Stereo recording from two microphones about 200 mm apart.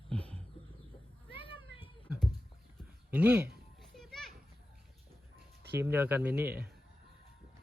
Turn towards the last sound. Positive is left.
turn(degrees=-10)  # may be behind; listen again after turning